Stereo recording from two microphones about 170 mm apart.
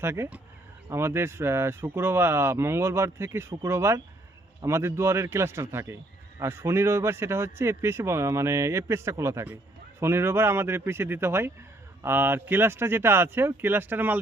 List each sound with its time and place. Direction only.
0.0 s speech: 15° right (ahead or behind)